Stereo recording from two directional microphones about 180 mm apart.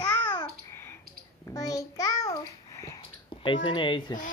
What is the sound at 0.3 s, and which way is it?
Babbling, 20° left (ahead or behind).